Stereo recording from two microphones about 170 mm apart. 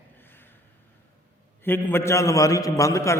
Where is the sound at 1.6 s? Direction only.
10° left (ahead or behind).